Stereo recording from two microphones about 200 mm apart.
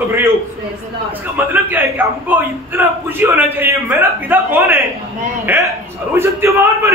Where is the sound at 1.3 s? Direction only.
10° right (ahead or behind).